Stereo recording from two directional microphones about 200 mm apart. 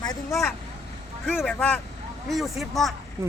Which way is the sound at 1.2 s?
5° left (ahead or behind).